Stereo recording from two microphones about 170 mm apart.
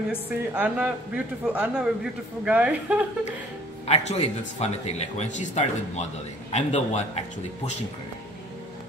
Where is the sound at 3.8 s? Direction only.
40° left (ahead or behind).